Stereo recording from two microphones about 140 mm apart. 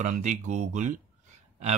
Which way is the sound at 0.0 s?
55° right (ahead or behind).